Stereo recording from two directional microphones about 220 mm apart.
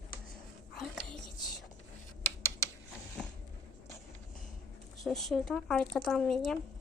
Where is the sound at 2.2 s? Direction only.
10° left (ahead or behind).